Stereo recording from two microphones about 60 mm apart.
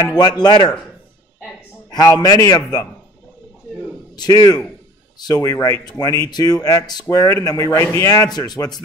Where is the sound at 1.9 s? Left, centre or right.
Left.